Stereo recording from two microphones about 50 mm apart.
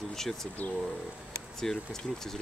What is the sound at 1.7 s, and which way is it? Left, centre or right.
Speech, centre.